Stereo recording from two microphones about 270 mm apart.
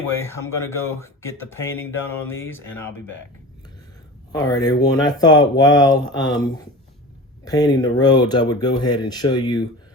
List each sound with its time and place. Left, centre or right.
0.1 s speech: centre
4.3 s speech: centre
7.4 s speech: centre